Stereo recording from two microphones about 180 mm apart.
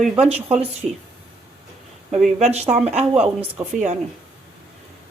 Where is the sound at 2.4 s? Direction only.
35° right (ahead or behind).